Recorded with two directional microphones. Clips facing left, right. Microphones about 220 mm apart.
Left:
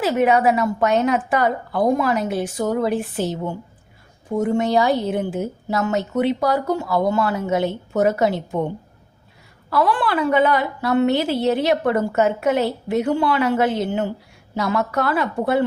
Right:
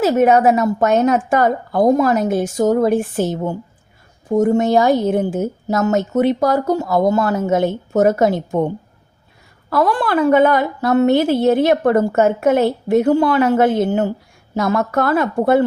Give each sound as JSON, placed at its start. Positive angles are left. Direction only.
{"t": 0.0, "sound": "a woman's voice", "side_deg": -45}
{"t": 9.6, "sound": "a woman's voice", "side_deg": -45}